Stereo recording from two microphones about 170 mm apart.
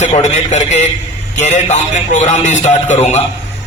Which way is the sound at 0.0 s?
45° left (ahead or behind).